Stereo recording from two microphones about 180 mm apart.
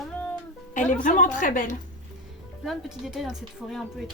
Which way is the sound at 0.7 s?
45° left (ahead or behind).